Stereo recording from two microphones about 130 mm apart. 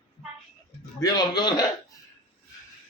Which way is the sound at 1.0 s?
30° left (ahead or behind).